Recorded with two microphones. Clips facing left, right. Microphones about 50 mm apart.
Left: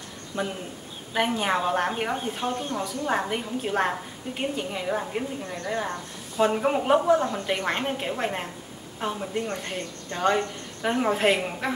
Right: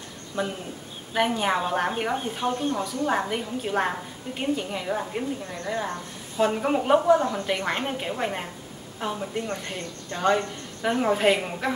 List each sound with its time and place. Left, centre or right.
0.3 s speech: left
1.1 s a woman's voice: centre